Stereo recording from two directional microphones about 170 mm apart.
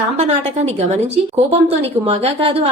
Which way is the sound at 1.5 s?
35° right (ahead or behind).